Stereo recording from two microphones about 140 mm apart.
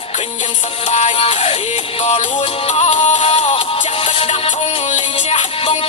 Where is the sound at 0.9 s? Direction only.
45° left (ahead or behind).